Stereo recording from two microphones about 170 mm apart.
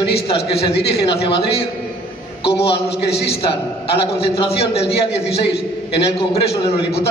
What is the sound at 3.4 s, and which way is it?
A man's voice, 35° left (ahead or behind).